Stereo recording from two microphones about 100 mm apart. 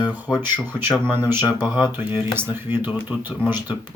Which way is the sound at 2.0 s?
20° right (ahead or behind).